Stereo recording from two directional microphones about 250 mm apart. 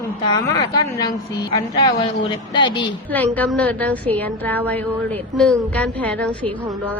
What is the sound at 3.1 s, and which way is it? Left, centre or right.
A woman's voice, centre.